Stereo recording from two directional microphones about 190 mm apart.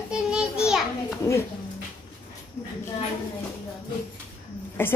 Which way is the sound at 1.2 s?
15° left (ahead or behind).